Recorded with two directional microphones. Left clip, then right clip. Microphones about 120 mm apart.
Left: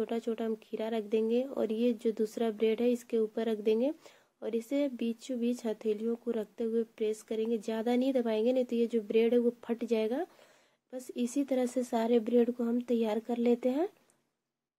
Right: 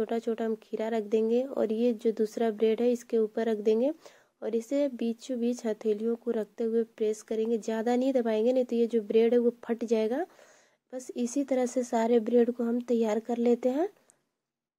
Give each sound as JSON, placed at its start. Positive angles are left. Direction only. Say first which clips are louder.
{"t": 0.0, "sound": "speech", "louder": "right 4 dB", "side_deg": -35}